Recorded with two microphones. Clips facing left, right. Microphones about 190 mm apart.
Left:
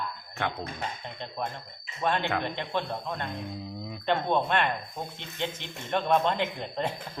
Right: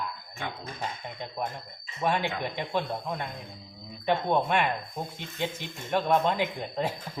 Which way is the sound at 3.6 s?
65° left (ahead or behind).